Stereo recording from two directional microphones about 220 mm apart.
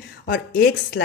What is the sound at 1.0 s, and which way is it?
Speech, 55° left (ahead or behind).